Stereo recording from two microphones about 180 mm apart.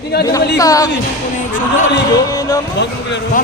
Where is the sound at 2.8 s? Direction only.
75° left (ahead or behind).